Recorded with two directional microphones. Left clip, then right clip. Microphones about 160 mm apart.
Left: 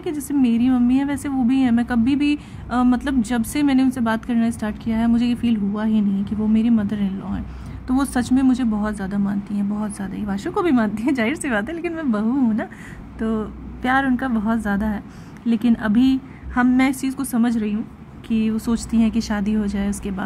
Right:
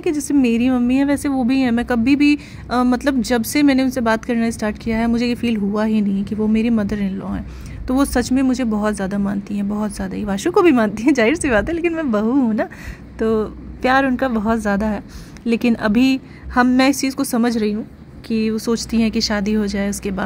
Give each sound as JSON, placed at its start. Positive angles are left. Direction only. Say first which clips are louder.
{"t": 0.0, "sound": "a woman's voice", "louder": "right 4 dB", "side_deg": -25}